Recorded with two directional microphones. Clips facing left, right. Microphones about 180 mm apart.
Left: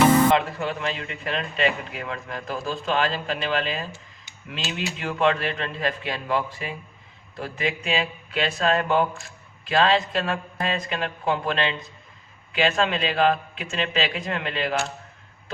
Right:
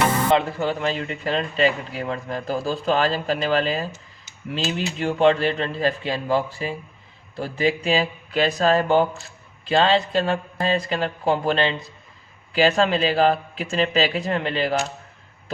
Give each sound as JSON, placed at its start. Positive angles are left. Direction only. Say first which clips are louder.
{"t": 0.3, "sound": "speech", "louder": "right 3 dB", "side_deg": -30}